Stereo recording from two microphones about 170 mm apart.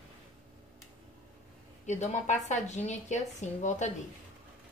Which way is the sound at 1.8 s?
45° left (ahead or behind).